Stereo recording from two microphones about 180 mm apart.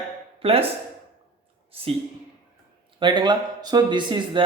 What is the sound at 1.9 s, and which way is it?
A man's voice, 35° right (ahead or behind).